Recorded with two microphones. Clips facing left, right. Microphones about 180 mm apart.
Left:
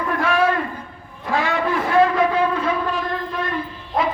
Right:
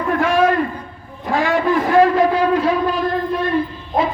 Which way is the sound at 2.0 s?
40° right (ahead or behind).